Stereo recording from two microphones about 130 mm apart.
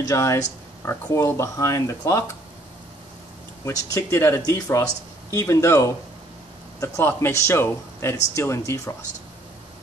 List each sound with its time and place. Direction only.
0.0 s speech: 25° left (ahead or behind)
3.6 s speech: 25° left (ahead or behind)